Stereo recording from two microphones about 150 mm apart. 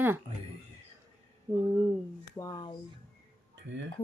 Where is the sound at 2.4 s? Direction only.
25° left (ahead or behind).